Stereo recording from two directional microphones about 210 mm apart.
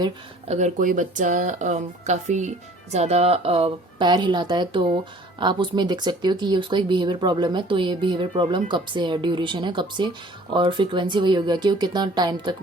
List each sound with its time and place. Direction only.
0.0 s speech: 30° right (ahead or behind)